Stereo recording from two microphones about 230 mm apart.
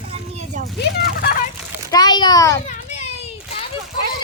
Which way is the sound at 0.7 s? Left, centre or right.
Left.